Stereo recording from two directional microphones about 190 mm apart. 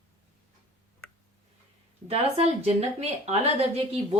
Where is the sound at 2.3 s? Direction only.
35° right (ahead or behind).